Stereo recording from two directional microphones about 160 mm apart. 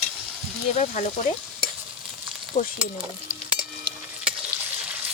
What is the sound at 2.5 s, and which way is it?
Speech, 45° left (ahead or behind).